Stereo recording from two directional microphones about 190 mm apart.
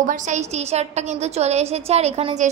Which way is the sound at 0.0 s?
40° right (ahead or behind).